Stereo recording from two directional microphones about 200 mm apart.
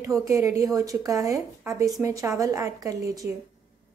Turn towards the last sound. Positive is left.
turn(degrees=-15)  # may be behind; listen again after turning